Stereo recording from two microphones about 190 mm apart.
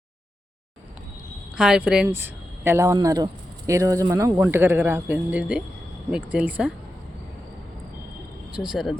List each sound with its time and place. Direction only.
1.5 s speech: 5° right (ahead or behind)
8.5 s speech: 5° right (ahead or behind)